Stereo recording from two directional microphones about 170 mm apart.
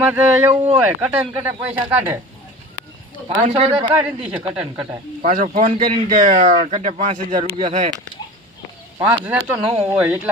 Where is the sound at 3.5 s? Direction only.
35° right (ahead or behind).